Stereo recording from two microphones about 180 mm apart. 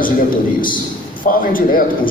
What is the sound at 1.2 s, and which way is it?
Speech, 50° left (ahead or behind).